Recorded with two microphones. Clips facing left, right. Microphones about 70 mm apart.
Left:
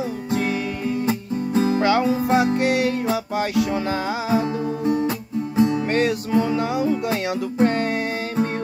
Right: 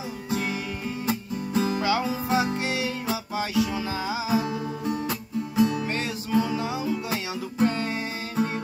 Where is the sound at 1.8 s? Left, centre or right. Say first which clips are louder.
Left 7 dB; left.